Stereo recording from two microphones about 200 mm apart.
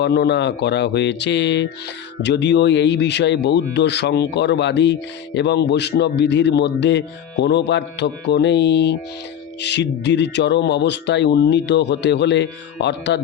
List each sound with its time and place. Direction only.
0.0 s speech: 55° left (ahead or behind)